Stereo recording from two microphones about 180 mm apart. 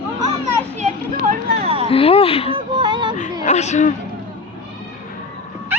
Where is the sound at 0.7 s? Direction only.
40° right (ahead or behind).